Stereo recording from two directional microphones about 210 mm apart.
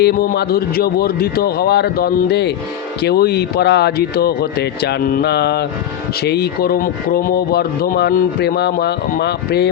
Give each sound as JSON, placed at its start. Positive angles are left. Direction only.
{"t": 0.0, "sound": "speech", "side_deg": 50}